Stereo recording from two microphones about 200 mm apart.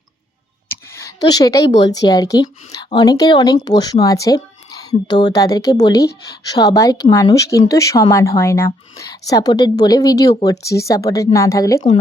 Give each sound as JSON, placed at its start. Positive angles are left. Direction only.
{"t": 0.9, "sound": "a woman's voice", "side_deg": 15}